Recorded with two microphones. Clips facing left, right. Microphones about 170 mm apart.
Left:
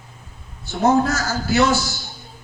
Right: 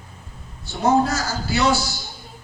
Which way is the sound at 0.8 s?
45° left (ahead or behind).